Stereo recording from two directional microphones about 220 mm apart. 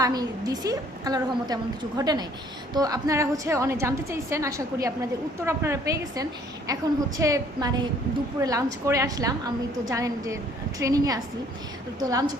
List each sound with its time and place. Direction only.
0.0 s a woman's voice: 15° right (ahead or behind)